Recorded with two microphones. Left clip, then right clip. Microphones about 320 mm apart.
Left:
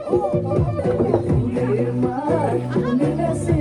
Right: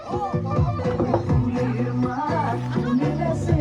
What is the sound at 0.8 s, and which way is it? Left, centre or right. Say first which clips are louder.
Music: left 4 dB; centre.